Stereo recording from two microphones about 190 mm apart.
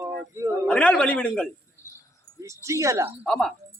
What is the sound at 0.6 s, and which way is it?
Speech, 5° left (ahead or behind).